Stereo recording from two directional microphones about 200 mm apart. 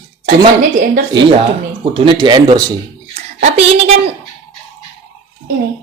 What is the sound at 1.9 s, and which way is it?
Speech, 25° right (ahead or behind).